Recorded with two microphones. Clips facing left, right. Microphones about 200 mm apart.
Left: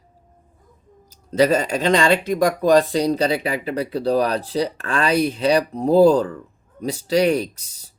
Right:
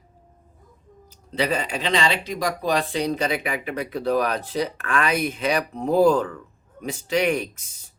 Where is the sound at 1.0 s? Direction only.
40° left (ahead or behind).